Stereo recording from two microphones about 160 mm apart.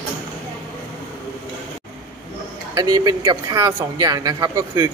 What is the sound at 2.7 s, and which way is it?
Speech, 25° right (ahead or behind).